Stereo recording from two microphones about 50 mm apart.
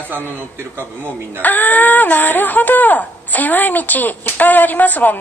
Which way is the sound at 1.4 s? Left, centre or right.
Left.